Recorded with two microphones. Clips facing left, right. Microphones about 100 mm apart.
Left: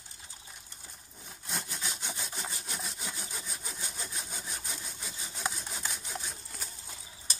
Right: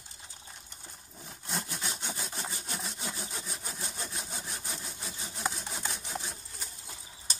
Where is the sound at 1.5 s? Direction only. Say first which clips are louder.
Right 2 dB; centre (ahead or behind).